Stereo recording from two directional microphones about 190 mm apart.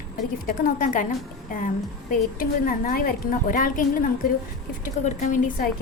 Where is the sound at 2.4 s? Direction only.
50° left (ahead or behind).